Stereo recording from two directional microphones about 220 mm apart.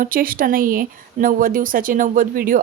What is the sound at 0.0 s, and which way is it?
Speech, 40° right (ahead or behind).